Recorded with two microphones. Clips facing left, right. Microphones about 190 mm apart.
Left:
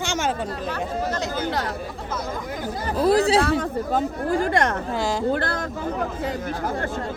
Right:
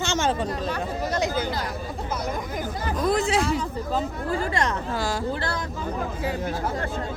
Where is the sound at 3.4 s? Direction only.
55° left (ahead or behind).